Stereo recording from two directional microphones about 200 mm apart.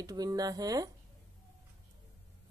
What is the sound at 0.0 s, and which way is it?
Speech, 20° right (ahead or behind).